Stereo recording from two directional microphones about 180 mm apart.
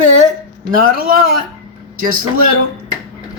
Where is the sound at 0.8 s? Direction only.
55° right (ahead or behind).